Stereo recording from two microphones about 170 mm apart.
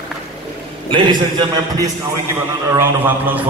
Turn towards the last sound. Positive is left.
turn(degrees=-15)  # may be behind; listen again after turning